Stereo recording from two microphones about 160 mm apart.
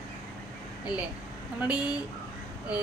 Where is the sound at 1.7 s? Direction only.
5° right (ahead or behind).